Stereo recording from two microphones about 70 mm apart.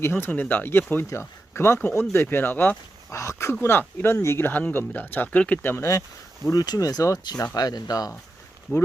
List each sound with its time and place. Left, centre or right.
0.0 s speech: left
0.3 s speech: left
3.1 s speech: left
3.5 s speech: left
5.7 s speech: left
6.4 s speech: left